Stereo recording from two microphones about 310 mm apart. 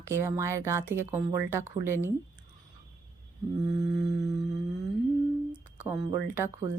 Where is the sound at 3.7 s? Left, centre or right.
Right.